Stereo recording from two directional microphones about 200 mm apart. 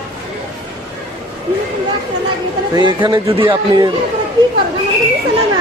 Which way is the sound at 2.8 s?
20° right (ahead or behind).